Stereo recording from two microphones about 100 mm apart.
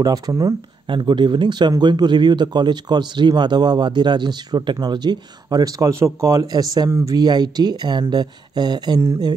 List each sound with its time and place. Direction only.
0.0 s speech: 40° right (ahead or behind)
0.8 s a man's voice: 55° right (ahead or behind)
6.9 s speech: 25° right (ahead or behind)
7.2 s a man's voice: 45° right (ahead or behind)